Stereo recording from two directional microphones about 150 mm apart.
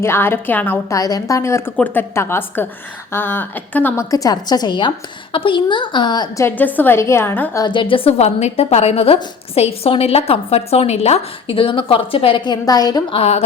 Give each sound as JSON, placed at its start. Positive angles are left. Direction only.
{"t": 0.0, "sound": "a woman's voice", "side_deg": 15}
{"t": 4.1, "sound": "a woman's voice", "side_deg": 25}
{"t": 6.4, "sound": "a woman's voice", "side_deg": 10}
{"t": 7.6, "sound": "a woman's voice", "side_deg": 30}